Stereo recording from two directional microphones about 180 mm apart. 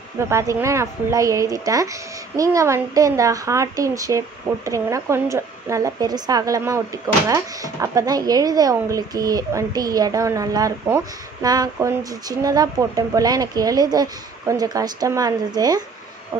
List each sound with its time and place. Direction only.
0.3 s speech: 15° right (ahead or behind)